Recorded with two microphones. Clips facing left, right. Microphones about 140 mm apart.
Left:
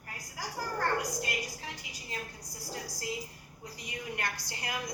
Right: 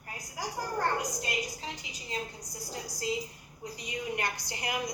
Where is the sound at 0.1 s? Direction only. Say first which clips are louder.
Right 3 dB; 15° right (ahead or behind).